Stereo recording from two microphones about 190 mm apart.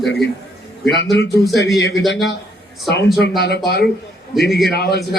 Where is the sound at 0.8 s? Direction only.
65° left (ahead or behind).